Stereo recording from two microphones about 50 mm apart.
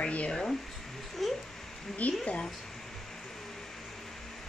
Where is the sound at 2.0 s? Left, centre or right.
Left.